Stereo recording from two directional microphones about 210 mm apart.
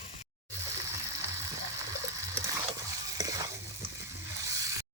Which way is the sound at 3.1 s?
15° right (ahead or behind).